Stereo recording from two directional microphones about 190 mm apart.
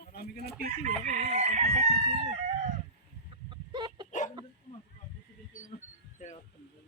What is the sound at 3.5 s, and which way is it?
Chicken, 25° right (ahead or behind).